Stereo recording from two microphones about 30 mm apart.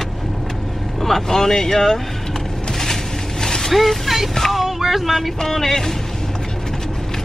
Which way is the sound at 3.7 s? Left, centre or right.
Centre.